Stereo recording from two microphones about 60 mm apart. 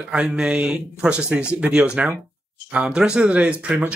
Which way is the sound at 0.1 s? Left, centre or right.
Centre.